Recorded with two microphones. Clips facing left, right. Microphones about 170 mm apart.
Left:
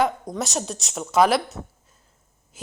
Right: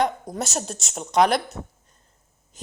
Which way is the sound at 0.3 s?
Centre (ahead or behind).